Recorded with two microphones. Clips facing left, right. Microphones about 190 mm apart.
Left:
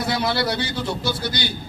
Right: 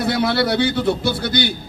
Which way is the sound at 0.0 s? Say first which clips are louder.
Right 4 dB; 55° right (ahead or behind).